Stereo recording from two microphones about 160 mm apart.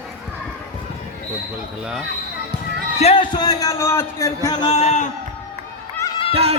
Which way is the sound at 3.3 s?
20° left (ahead or behind).